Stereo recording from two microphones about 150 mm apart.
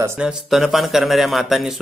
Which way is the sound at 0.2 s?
5° right (ahead or behind).